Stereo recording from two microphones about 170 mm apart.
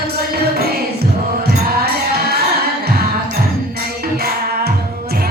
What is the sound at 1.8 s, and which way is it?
Music, 65° right (ahead or behind).